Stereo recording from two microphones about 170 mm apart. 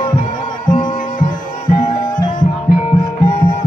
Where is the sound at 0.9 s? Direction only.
55° left (ahead or behind).